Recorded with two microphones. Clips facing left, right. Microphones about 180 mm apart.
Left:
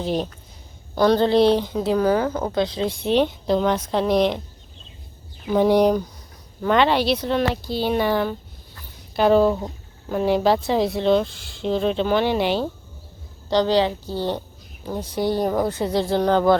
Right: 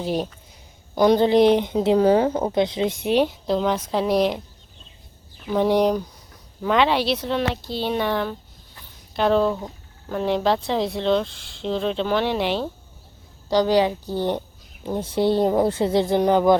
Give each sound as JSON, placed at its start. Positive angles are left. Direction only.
{"t": 0.0, "sound": "speech", "side_deg": -10}
{"t": 5.5, "sound": "speech", "side_deg": 0}
{"t": 13.5, "sound": "speech", "side_deg": -10}